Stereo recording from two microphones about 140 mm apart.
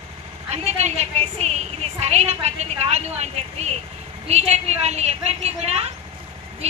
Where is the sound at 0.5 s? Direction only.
55° right (ahead or behind).